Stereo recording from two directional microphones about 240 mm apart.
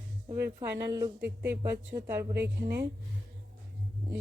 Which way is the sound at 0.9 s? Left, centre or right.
Centre.